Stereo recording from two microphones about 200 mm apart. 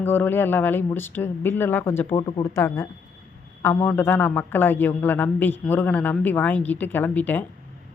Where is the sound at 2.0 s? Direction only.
20° left (ahead or behind).